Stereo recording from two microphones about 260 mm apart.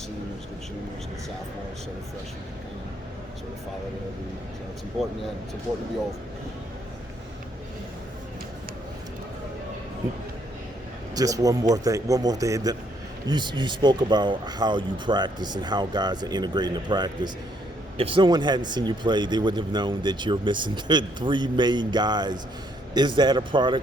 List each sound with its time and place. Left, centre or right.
11.1 s a man's voice: centre